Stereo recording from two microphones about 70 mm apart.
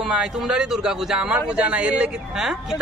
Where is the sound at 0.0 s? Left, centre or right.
Centre.